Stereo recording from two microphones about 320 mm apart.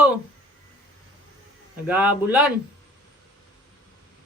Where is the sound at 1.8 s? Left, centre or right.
Centre.